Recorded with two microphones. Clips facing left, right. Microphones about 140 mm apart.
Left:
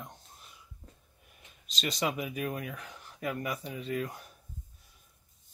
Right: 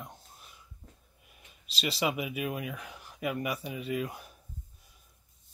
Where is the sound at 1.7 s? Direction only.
10° right (ahead or behind).